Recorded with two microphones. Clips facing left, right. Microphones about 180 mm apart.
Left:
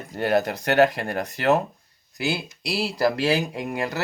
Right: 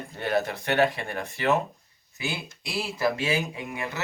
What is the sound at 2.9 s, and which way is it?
Speech, 35° left (ahead or behind).